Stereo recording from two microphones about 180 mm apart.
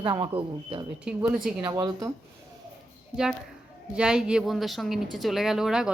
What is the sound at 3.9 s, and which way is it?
A woman's voice, 5° right (ahead or behind).